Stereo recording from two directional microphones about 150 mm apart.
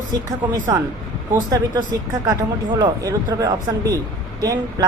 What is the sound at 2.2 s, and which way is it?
Speech, 25° right (ahead or behind).